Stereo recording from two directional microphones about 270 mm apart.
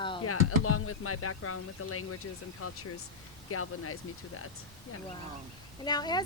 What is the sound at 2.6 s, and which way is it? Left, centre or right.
Speech, left.